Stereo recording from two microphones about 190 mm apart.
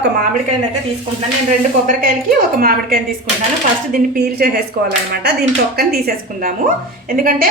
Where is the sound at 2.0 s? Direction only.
50° right (ahead or behind).